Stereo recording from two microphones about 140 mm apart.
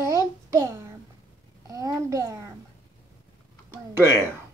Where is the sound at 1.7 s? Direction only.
25° right (ahead or behind).